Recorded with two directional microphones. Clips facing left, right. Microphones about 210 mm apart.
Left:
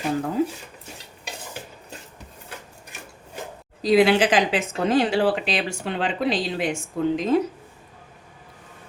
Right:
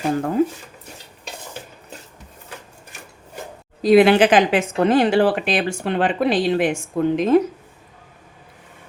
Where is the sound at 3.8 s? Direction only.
55° right (ahead or behind).